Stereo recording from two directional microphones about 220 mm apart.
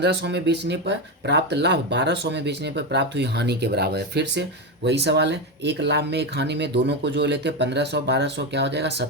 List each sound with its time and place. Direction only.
0.0 s speech: 50° right (ahead or behind)